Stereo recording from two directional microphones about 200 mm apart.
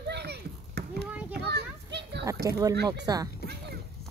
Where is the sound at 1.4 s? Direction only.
55° right (ahead or behind).